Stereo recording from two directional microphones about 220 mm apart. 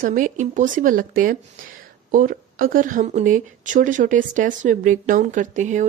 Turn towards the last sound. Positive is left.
turn(degrees=-35)  # may be behind; listen again after turning